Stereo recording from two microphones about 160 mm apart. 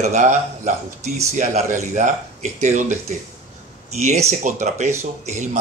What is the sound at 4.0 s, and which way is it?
A man's voice, 45° right (ahead or behind).